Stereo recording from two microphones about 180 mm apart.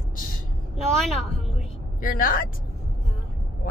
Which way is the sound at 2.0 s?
50° left (ahead or behind).